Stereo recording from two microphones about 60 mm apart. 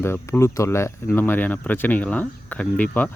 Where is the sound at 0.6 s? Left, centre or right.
Left.